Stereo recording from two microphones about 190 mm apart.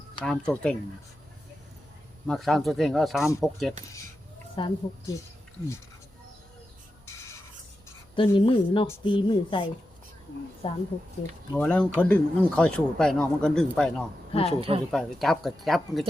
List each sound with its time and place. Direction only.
0.3 s speech: 5° left (ahead or behind)
2.2 s speech: centre (ahead or behind)
4.5 s speech: 25° left (ahead or behind)
8.1 s speech: 25° left (ahead or behind)
11.5 s speech: 5° left (ahead or behind)
14.3 s speech: 30° left (ahead or behind)
14.9 s speech: centre (ahead or behind)